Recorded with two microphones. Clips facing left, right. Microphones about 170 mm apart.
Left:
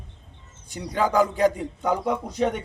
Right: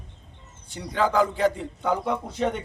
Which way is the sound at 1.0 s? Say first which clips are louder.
Left 1 dB; 15° left (ahead or behind).